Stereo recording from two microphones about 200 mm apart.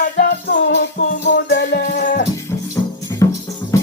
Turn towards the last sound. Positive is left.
turn(degrees=15)  # may be behind; listen again after turning